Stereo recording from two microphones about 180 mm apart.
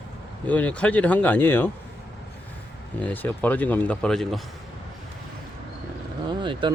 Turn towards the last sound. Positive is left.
turn(degrees=-25)  # may be behind; listen again after turning